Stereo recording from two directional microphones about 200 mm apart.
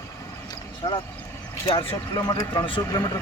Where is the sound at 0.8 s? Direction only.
20° left (ahead or behind).